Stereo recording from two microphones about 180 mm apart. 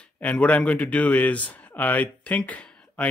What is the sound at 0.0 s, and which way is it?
Speech, 5° left (ahead or behind).